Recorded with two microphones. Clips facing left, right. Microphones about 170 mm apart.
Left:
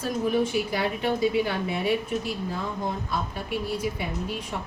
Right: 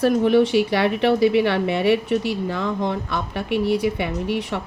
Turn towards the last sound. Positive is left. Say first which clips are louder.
# right 7 dB
turn(degrees=-75)  # may be behind; listen again after turning